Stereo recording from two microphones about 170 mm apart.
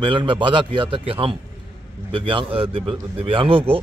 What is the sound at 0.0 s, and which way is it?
A man's voice, 30° right (ahead or behind).